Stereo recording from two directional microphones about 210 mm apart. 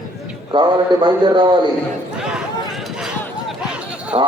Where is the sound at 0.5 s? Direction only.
20° right (ahead or behind).